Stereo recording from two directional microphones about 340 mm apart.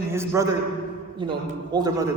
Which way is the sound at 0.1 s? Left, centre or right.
Centre.